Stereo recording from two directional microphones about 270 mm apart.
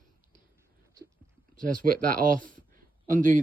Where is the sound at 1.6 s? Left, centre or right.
Right.